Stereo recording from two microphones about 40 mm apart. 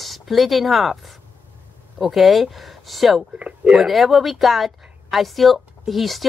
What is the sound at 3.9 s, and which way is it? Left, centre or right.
Speech, centre.